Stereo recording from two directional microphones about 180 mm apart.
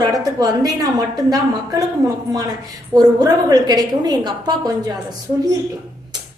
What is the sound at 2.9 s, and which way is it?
A woman's voice, 20° right (ahead or behind).